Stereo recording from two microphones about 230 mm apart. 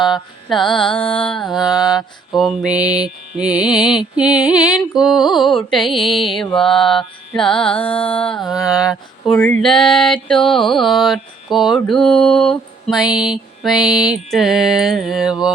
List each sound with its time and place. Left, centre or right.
0.0 s mantra: centre
0.7 s music: left
1.2 s mantra: centre